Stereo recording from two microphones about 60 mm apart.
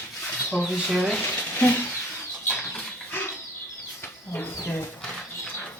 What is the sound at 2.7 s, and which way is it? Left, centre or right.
Bird flight, left.